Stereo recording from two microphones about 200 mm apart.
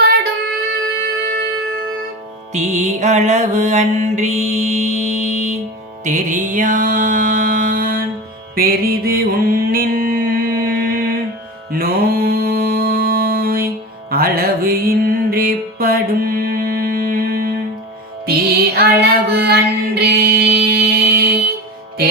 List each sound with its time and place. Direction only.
1.0 s music: 50° right (ahead or behind)
2.5 s mantra: 35° right (ahead or behind)
6.1 s music: 40° right (ahead or behind)
11.7 s mantra: 50° right (ahead or behind)
14.1 s music: 50° right (ahead or behind)